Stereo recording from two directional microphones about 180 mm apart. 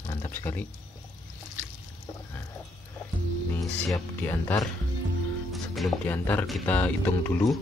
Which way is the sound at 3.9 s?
10° left (ahead or behind).